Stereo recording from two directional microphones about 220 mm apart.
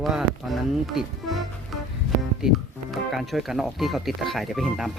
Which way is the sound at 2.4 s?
5° right (ahead or behind).